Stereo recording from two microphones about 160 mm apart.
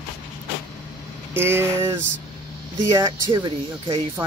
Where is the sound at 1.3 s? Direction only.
15° right (ahead or behind).